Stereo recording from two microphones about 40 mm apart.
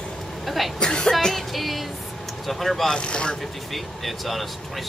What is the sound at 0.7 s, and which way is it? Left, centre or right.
Speech, centre.